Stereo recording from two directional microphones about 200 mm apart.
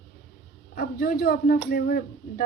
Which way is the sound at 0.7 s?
50° left (ahead or behind).